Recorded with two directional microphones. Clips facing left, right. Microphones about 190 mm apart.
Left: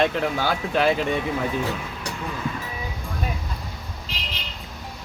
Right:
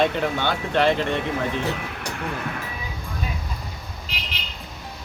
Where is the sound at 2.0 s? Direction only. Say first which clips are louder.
Even; 65° right (ahead or behind).